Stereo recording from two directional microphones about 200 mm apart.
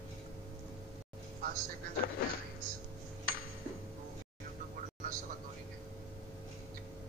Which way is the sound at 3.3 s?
50° left (ahead or behind).